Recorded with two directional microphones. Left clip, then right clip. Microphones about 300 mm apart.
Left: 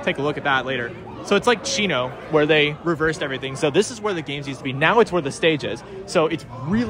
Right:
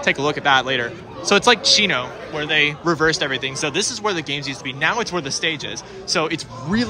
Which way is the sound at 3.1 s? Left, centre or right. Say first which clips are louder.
Right 4 dB; centre.